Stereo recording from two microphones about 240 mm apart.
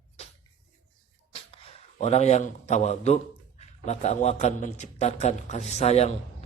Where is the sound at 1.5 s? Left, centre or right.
Left.